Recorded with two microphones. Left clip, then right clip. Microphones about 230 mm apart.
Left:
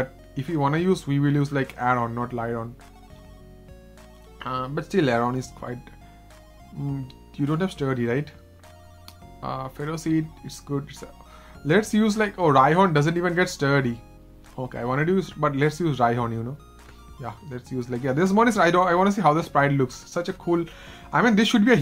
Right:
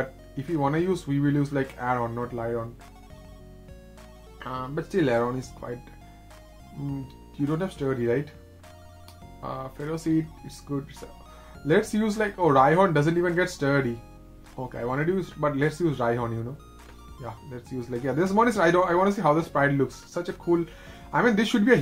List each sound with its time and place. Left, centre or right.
0.0 s music: left
0.6 s speech: left
4.4 s speech: left
7.3 s speech: left
9.4 s speech: left